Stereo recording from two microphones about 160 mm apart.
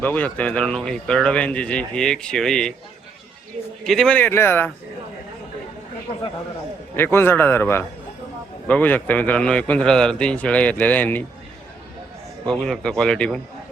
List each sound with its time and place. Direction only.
0.0 s speech: 10° left (ahead or behind)
3.8 s a man's voice: 5° left (ahead or behind)
6.9 s a man's voice: 15° left (ahead or behind)
12.5 s speech: 5° left (ahead or behind)